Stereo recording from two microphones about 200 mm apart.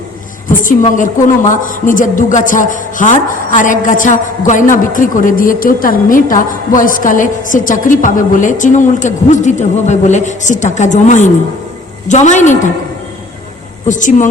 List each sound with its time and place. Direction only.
0.5 s a woman's voice: 40° left (ahead or behind)
13.8 s a woman's voice: 40° left (ahead or behind)